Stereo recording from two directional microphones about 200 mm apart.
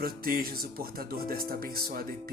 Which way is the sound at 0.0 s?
45° right (ahead or behind).